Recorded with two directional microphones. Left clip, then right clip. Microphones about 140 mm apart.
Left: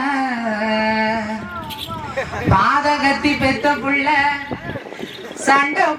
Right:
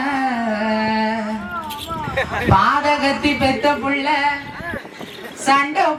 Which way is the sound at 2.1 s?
30° right (ahead or behind).